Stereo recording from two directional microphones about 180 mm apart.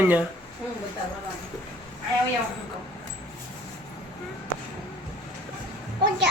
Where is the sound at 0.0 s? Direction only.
10° right (ahead or behind).